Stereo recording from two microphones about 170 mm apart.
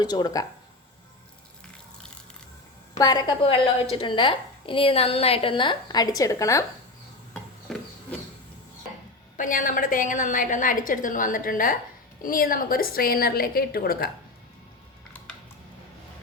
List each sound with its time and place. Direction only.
0.0 s a woman's voice: 25° left (ahead or behind)
3.0 s a woman's voice: 25° left (ahead or behind)
7.7 s a sound: centre (ahead or behind)
9.4 s a woman's voice: 50° left (ahead or behind)